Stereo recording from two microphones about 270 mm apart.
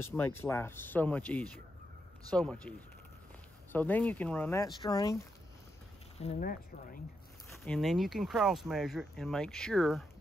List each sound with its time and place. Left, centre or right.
0.1 s speech: centre
3.7 s speech: centre
6.1 s speech: left
7.6 s speech: centre